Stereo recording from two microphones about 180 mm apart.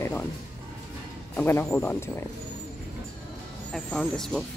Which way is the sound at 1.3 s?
10° left (ahead or behind).